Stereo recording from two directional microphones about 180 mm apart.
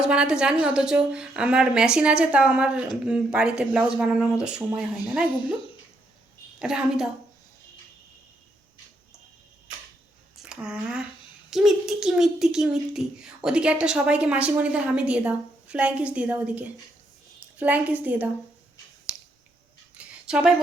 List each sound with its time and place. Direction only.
0.0 s a child's voice: 5° right (ahead or behind)
6.6 s a child's voice: 5° right (ahead or behind)
10.3 s a sound: 5° right (ahead or behind)
11.5 s a child's voice: 5° right (ahead or behind)
19.1 s finger snapping: 20° left (ahead or behind)
20.0 s a sound: 5° right (ahead or behind)